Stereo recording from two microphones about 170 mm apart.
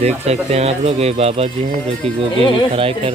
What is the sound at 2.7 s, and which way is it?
Speech, 35° right (ahead or behind).